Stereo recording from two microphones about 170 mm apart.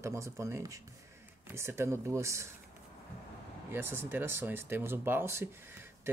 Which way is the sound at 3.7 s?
15° right (ahead or behind).